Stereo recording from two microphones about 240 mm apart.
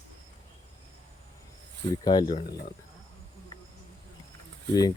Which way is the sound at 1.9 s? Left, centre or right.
Centre.